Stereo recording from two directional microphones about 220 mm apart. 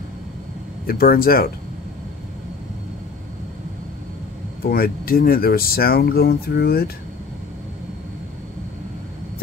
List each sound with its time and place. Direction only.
0.8 s speech: 40° left (ahead or behind)
4.6 s speech: 45° left (ahead or behind)